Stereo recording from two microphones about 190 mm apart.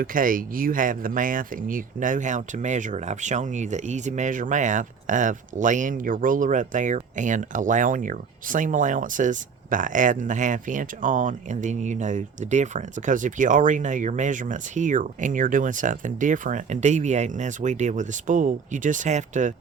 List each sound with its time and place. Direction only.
0.0 s speech: 45° right (ahead or behind)